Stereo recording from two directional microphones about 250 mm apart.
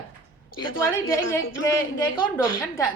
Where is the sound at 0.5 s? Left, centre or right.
Left.